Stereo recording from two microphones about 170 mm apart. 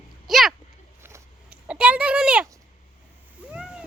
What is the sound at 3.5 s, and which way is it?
Splash, 5° right (ahead or behind).